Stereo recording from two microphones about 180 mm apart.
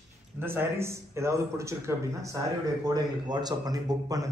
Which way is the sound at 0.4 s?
10° right (ahead or behind).